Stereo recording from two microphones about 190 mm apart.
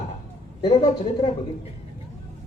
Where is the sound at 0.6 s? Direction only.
25° left (ahead or behind).